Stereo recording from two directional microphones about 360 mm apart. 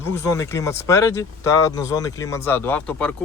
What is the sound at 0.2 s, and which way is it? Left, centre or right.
Speech, centre.